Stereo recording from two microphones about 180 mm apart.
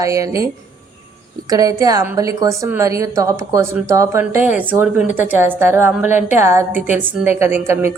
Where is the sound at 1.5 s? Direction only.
20° right (ahead or behind).